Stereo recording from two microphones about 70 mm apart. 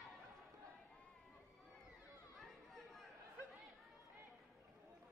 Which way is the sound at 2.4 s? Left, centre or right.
Centre.